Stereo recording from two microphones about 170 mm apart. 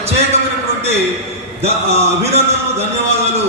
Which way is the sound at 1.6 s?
40° right (ahead or behind).